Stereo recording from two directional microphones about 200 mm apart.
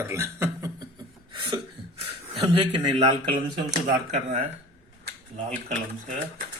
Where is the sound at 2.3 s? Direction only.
25° right (ahead or behind).